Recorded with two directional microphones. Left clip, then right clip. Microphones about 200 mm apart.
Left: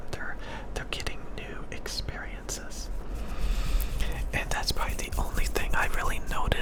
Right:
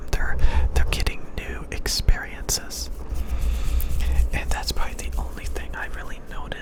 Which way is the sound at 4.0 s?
5° right (ahead or behind).